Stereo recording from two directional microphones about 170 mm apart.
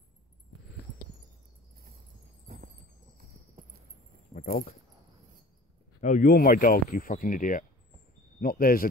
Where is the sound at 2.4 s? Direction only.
50° right (ahead or behind).